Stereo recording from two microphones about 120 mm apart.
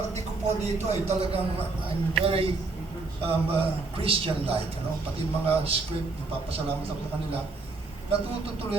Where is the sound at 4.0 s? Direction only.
50° right (ahead or behind).